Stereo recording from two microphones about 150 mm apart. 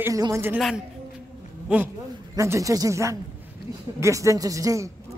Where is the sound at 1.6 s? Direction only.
10° right (ahead or behind).